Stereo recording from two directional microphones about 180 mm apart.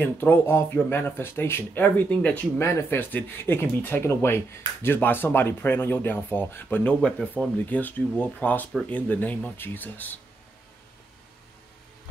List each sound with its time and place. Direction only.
0.0 s speech: 10° left (ahead or behind)